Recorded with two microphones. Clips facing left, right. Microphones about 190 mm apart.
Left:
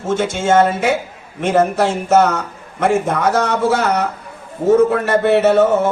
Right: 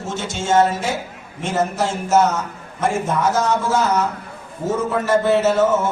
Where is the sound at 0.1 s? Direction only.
55° left (ahead or behind).